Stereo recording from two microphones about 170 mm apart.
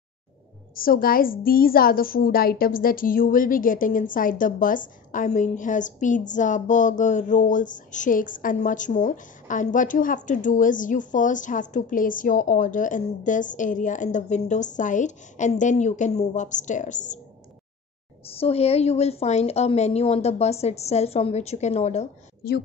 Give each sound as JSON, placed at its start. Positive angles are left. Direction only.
{"t": 0.7, "sound": "a woman's voice", "side_deg": 55}
{"t": 18.2, "sound": "a woman's voice", "side_deg": 35}